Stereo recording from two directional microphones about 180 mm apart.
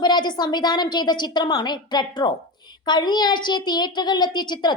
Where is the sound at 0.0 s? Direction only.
25° left (ahead or behind).